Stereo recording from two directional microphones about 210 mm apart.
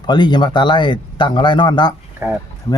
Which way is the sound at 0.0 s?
20° left (ahead or behind).